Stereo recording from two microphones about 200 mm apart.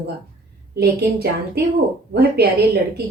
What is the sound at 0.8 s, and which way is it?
A woman's voice, 55° right (ahead or behind).